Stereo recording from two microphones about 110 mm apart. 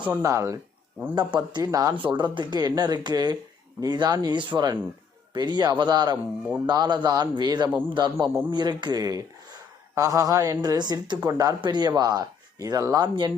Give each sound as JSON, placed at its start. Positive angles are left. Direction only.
{"t": 0.2, "sound": "speech", "side_deg": -30}
{"t": 1.1, "sound": "speech", "side_deg": -40}
{"t": 2.0, "sound": "a man's voice", "side_deg": -45}